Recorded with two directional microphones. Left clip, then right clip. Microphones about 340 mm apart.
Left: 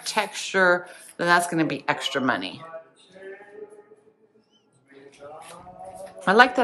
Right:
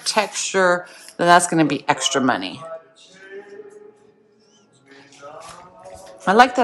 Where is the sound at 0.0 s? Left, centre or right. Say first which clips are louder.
Right 6 dB; centre.